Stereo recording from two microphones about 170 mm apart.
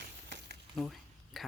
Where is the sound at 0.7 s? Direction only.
Centre (ahead or behind).